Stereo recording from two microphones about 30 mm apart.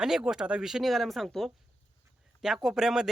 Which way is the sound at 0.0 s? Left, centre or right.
Centre.